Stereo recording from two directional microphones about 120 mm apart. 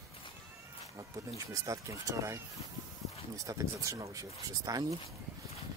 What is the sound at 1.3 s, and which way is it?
Speech, 30° right (ahead or behind).